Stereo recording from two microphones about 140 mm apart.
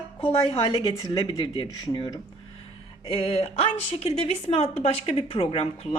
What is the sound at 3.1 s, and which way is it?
A woman's voice, 40° left (ahead or behind).